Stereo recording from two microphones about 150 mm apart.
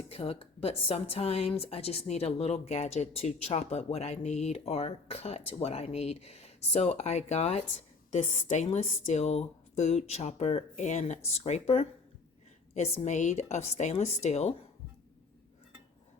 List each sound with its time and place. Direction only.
0.1 s a woman's voice: 40° left (ahead or behind)